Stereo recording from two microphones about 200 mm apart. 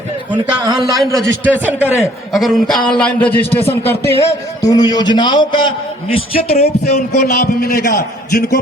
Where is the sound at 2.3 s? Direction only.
Centre (ahead or behind).